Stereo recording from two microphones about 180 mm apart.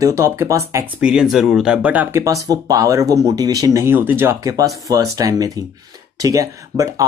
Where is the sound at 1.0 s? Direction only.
5° right (ahead or behind).